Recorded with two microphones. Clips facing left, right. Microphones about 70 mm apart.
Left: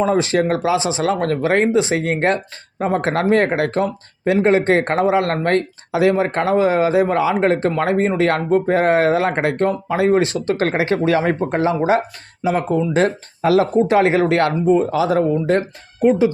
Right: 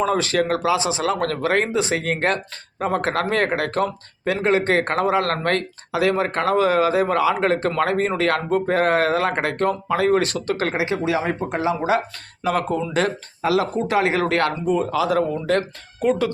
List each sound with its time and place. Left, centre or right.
0.0 s speech: left
10.7 s speech: left
12.4 s speech: centre